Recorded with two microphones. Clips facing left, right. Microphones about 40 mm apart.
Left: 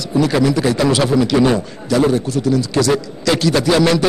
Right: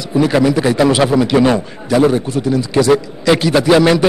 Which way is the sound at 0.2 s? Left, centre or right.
Centre.